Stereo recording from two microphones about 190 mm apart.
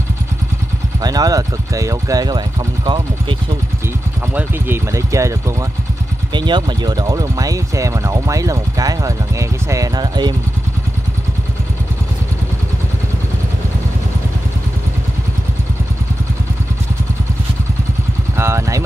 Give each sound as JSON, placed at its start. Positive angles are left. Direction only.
{"t": 1.0, "sound": "speech", "side_deg": -20}
{"t": 4.3, "sound": "speech", "side_deg": -10}
{"t": 18.4, "sound": "speech", "side_deg": -15}